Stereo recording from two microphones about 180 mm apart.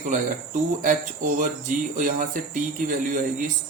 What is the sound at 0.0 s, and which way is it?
Speech, 45° right (ahead or behind).